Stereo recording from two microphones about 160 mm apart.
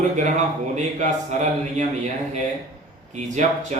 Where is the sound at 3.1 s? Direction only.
45° right (ahead or behind).